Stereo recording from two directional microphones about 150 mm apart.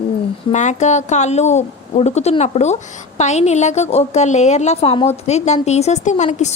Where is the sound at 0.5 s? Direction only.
50° left (ahead or behind).